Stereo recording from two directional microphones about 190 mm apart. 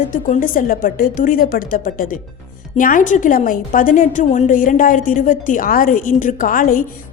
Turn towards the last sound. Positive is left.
turn(degrees=45)  # may be behind; listen again after turning